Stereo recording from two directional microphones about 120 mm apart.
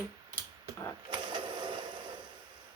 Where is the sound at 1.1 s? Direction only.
40° right (ahead or behind).